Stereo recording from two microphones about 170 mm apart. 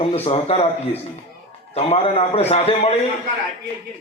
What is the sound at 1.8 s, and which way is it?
Speech, 35° left (ahead or behind).